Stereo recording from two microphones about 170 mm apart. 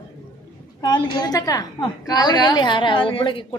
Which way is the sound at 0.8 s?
25° left (ahead or behind).